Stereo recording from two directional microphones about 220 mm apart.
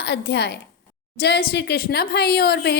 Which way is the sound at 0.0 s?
50° left (ahead or behind).